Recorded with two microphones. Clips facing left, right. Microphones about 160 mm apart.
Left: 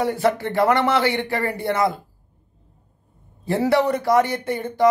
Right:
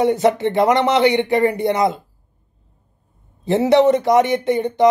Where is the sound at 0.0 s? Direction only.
20° right (ahead or behind).